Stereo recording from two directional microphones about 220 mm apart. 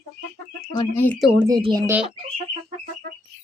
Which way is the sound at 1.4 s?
15° right (ahead or behind).